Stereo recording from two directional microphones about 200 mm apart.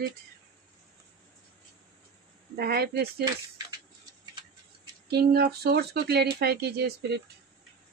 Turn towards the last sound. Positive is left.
turn(degrees=-55)  # may be behind; listen again after turning